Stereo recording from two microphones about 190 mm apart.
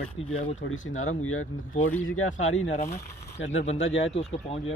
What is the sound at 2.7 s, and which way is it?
Speech, 35° left (ahead or behind).